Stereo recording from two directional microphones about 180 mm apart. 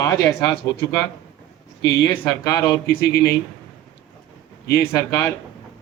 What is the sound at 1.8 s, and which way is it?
Speech, 70° left (ahead or behind).